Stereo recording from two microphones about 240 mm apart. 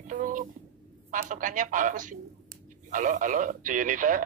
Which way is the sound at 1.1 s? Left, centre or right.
Right.